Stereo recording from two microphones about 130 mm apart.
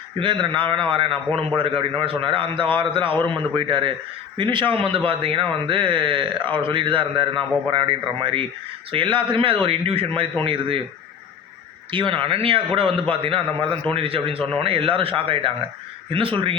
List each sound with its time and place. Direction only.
0.2 s a man's voice: 40° right (ahead or behind)
11.9 s a man's voice: 40° right (ahead or behind)